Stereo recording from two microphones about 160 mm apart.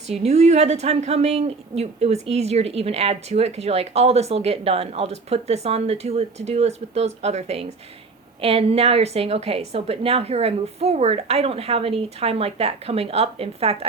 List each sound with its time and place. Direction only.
0.1 s a woman's voice: 40° right (ahead or behind)